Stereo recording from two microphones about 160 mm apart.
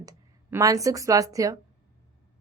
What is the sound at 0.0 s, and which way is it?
A woman's voice, 20° right (ahead or behind).